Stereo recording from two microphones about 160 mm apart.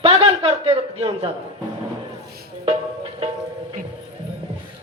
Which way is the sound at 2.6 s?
35° right (ahead or behind).